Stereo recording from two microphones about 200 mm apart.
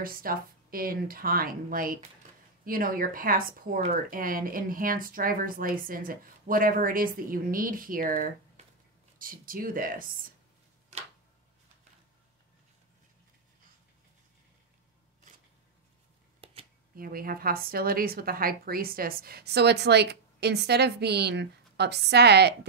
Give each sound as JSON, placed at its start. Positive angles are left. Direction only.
{"t": 0.0, "sound": "speech", "side_deg": -45}
{"t": 16.4, "sound": "a sound", "side_deg": -30}
{"t": 16.9, "sound": "speech", "side_deg": -45}